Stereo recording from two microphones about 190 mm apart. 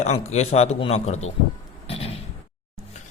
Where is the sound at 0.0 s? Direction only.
35° left (ahead or behind).